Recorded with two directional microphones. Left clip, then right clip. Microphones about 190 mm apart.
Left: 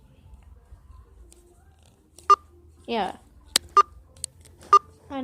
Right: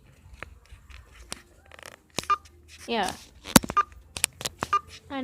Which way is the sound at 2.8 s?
5° left (ahead or behind).